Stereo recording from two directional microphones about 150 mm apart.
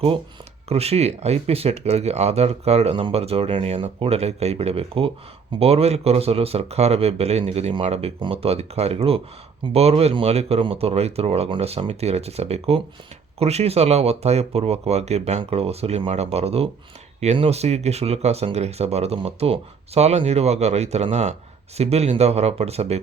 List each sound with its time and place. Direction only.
0.7 s speech: 45° right (ahead or behind)